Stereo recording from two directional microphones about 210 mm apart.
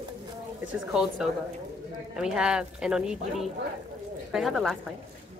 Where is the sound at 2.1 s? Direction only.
5° right (ahead or behind).